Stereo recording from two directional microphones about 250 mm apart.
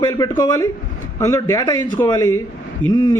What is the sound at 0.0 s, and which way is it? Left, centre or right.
Speech, centre.